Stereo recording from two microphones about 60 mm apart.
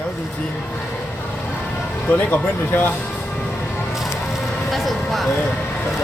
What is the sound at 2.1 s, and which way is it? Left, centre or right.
Speech, left.